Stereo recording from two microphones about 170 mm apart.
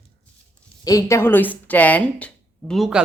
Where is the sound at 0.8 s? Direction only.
20° left (ahead or behind).